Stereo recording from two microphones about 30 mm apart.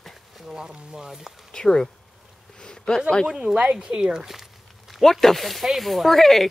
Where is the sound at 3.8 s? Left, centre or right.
Right.